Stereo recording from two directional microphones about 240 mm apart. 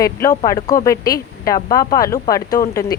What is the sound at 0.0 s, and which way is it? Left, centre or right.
Speech, centre.